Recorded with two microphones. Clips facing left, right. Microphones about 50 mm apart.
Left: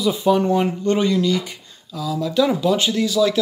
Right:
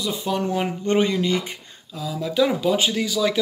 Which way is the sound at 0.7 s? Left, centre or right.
Right.